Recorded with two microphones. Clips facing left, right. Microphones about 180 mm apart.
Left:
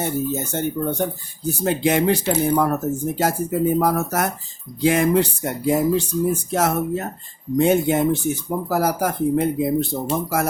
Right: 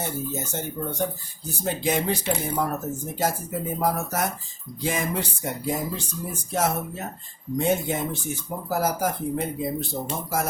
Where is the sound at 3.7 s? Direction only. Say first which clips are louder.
Left 6 dB; 70° left (ahead or behind).